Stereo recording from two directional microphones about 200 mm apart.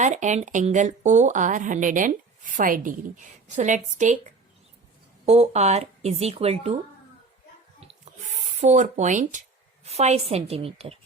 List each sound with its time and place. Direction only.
0.0 s speech: 35° right (ahead or behind)
5.2 s speech: 30° right (ahead or behind)
8.6 s speech: 35° right (ahead or behind)